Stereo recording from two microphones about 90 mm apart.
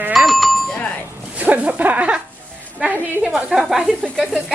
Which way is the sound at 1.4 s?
15° right (ahead or behind).